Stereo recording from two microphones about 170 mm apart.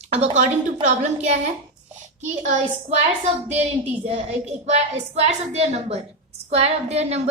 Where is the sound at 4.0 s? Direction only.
40° right (ahead or behind).